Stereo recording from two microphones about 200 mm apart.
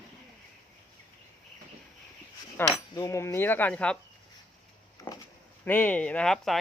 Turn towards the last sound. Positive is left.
turn(degrees=5)  # may be behind; listen again after turning